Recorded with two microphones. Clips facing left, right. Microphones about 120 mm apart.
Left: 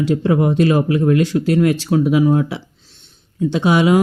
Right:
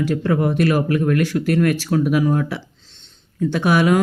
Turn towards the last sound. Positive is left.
turn(degrees=20)  # may be behind; listen again after turning